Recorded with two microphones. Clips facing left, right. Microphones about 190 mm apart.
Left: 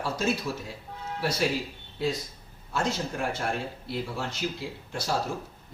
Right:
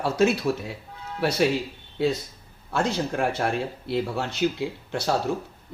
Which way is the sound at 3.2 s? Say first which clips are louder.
Right 5 dB; 65° right (ahead or behind).